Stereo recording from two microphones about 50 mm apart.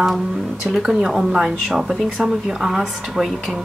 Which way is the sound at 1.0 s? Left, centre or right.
Centre.